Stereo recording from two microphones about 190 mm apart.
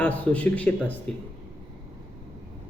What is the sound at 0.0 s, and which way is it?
Speech, 5° left (ahead or behind).